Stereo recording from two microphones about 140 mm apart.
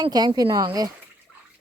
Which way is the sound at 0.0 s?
30° right (ahead or behind).